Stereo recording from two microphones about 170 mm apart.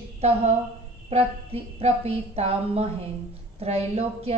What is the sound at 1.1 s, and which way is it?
Speech, 40° right (ahead or behind).